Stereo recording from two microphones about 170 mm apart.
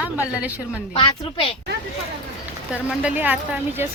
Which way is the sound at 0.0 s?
10° right (ahead or behind).